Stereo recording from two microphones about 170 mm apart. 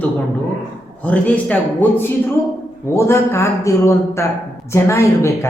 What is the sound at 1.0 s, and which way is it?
Speech, 10° left (ahead or behind).